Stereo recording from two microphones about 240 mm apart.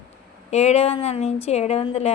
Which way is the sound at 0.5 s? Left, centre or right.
Left.